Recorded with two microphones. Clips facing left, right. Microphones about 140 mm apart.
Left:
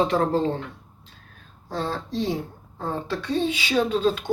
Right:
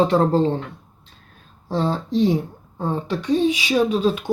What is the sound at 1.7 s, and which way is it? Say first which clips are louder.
Speech: right 6 dB; 25° right (ahead or behind).